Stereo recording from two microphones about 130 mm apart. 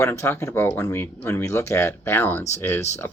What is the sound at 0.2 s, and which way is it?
Speech, 20° left (ahead or behind).